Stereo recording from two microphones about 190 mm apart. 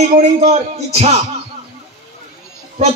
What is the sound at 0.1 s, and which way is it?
Speech, 35° right (ahead or behind).